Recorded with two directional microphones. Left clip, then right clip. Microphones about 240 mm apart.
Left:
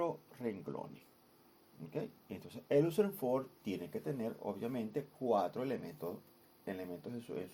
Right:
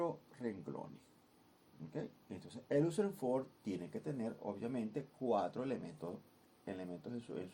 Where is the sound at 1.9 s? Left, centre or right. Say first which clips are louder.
Left 4 dB; left.